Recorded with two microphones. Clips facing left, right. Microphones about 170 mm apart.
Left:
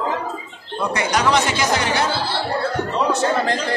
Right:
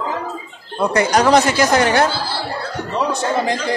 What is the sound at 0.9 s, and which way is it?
Speech, 40° right (ahead or behind).